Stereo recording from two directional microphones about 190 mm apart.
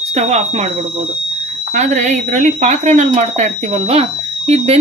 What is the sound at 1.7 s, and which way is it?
Speech, 40° right (ahead or behind).